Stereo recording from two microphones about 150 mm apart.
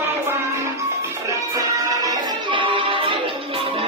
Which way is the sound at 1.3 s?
25° right (ahead or behind).